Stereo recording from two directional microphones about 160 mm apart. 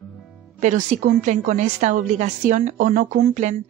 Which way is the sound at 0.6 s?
55° right (ahead or behind).